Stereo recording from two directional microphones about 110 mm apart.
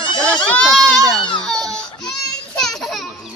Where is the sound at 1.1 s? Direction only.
5° left (ahead or behind).